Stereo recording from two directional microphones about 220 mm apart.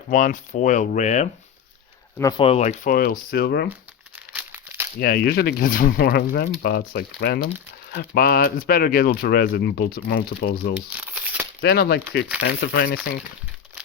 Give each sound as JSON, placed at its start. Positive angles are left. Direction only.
{"t": 0.1, "sound": "speech", "side_deg": 35}
{"t": 2.4, "sound": "speech", "side_deg": 30}
{"t": 4.3, "sound": "crumpling", "side_deg": -5}
{"t": 4.9, "sound": "speech", "side_deg": 45}
{"t": 10.8, "sound": "crumpling", "side_deg": -5}
{"t": 11.6, "sound": "speech", "side_deg": 45}